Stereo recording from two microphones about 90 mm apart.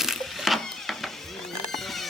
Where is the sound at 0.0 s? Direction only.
Centre (ahead or behind).